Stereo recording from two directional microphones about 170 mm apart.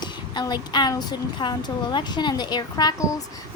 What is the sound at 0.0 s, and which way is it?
Speech, 25° left (ahead or behind).